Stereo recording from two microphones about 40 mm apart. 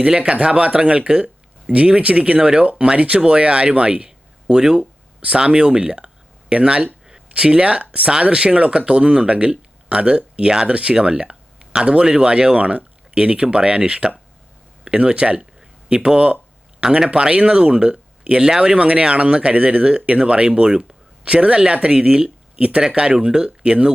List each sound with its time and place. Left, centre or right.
0.0 s speech: right
16.1 s speech: right
16.8 s speech: right